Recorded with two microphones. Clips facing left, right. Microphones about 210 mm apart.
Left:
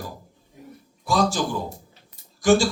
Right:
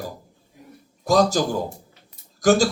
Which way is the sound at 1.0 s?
40° right (ahead or behind).